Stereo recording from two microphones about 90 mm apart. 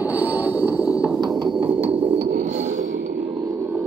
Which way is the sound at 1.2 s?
50° right (ahead or behind).